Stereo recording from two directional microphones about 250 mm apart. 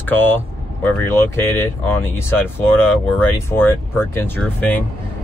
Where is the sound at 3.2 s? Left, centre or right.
Centre.